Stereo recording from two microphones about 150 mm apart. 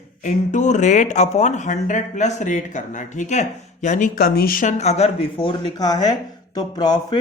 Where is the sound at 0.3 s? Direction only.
50° left (ahead or behind); by 4.7 s 70° left (ahead or behind).